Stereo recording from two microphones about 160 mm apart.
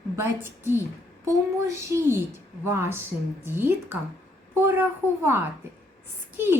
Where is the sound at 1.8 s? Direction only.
15° right (ahead or behind).